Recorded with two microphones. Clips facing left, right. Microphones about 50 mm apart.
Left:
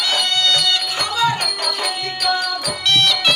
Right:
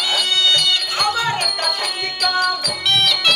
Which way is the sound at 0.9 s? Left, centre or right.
Right.